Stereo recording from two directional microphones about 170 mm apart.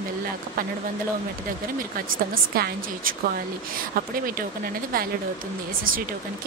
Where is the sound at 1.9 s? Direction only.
60° right (ahead or behind).